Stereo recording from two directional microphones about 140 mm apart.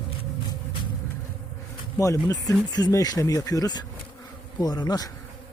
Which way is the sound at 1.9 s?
20° left (ahead or behind).